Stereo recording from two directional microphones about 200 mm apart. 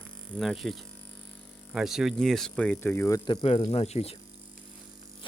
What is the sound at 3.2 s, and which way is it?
Speech, 30° left (ahead or behind).